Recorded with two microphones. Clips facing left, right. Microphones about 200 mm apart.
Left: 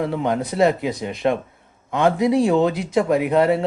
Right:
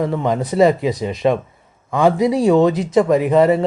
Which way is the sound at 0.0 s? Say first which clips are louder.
Right 3 dB; 5° left (ahead or behind).